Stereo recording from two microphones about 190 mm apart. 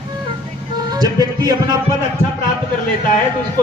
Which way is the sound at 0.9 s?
20° right (ahead or behind).